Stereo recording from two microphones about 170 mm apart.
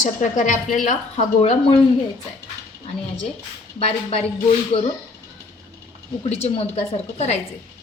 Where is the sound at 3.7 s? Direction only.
35° left (ahead or behind).